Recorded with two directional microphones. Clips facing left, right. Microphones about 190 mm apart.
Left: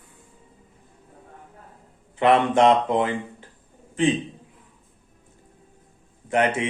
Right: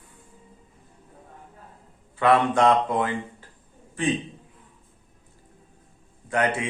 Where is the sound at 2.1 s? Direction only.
20° left (ahead or behind).